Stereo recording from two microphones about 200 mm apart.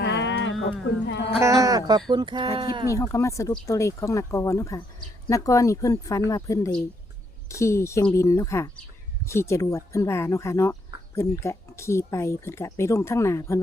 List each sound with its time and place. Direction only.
0.0 s a sound: 60° left (ahead or behind)
1.0 s speech: 60° left (ahead or behind)
1.4 s speech: 15° right (ahead or behind)
2.9 s speech: 15° left (ahead or behind)